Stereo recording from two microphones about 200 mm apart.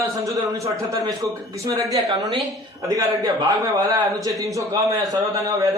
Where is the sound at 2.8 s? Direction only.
20° right (ahead or behind).